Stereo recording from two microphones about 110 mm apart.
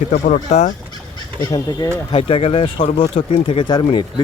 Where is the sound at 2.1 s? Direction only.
60° left (ahead or behind).